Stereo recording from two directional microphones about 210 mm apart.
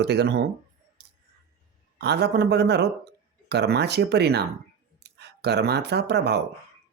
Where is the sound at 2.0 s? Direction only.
50° right (ahead or behind).